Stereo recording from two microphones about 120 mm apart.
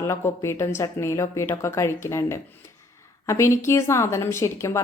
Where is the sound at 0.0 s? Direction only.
20° left (ahead or behind).